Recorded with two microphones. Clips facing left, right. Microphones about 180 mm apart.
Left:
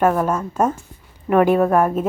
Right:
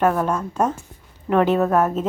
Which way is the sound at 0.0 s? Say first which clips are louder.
Left 2 dB; 10° left (ahead or behind).